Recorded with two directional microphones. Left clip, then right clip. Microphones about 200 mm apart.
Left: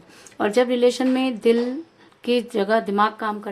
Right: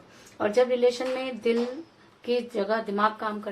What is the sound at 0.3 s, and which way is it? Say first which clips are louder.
A woman's voice: left 4 dB; 40° left (ahead or behind).